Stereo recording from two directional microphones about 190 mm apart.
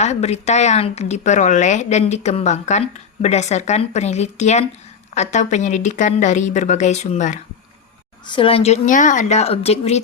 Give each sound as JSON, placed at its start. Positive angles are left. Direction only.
{"t": 0.0, "sound": "a woman's voice", "side_deg": 35}